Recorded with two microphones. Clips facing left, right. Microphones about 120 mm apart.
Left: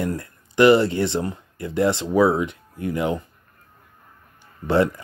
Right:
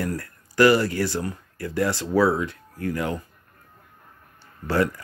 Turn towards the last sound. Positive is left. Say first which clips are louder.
# left 4 dB
turn(degrees=25)  # may be behind; listen again after turning